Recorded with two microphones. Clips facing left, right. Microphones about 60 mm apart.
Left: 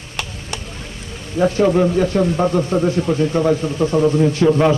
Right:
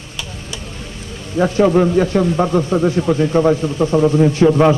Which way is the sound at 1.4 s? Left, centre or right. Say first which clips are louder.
Right 1 dB; right.